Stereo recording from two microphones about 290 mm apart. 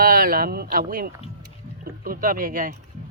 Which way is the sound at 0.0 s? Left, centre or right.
Right.